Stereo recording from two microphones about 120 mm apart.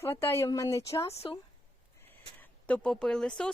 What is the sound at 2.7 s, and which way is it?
Speech, 5° left (ahead or behind).